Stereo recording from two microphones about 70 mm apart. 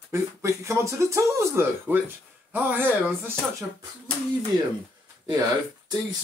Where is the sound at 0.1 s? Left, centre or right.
Right.